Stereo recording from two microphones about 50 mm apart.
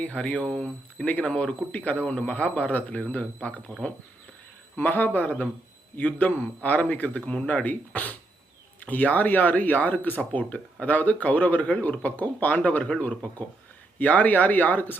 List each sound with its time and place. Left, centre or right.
0.0 s speech: left
1.7 s speech: left
4.8 s speech: left